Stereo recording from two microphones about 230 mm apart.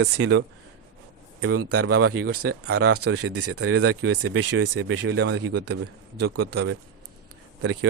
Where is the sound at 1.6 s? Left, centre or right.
Right.